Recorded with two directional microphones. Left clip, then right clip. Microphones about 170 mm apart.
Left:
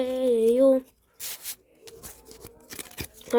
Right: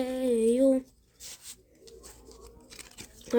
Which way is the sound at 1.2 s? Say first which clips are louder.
Left 7 dB; 50° left (ahead or behind).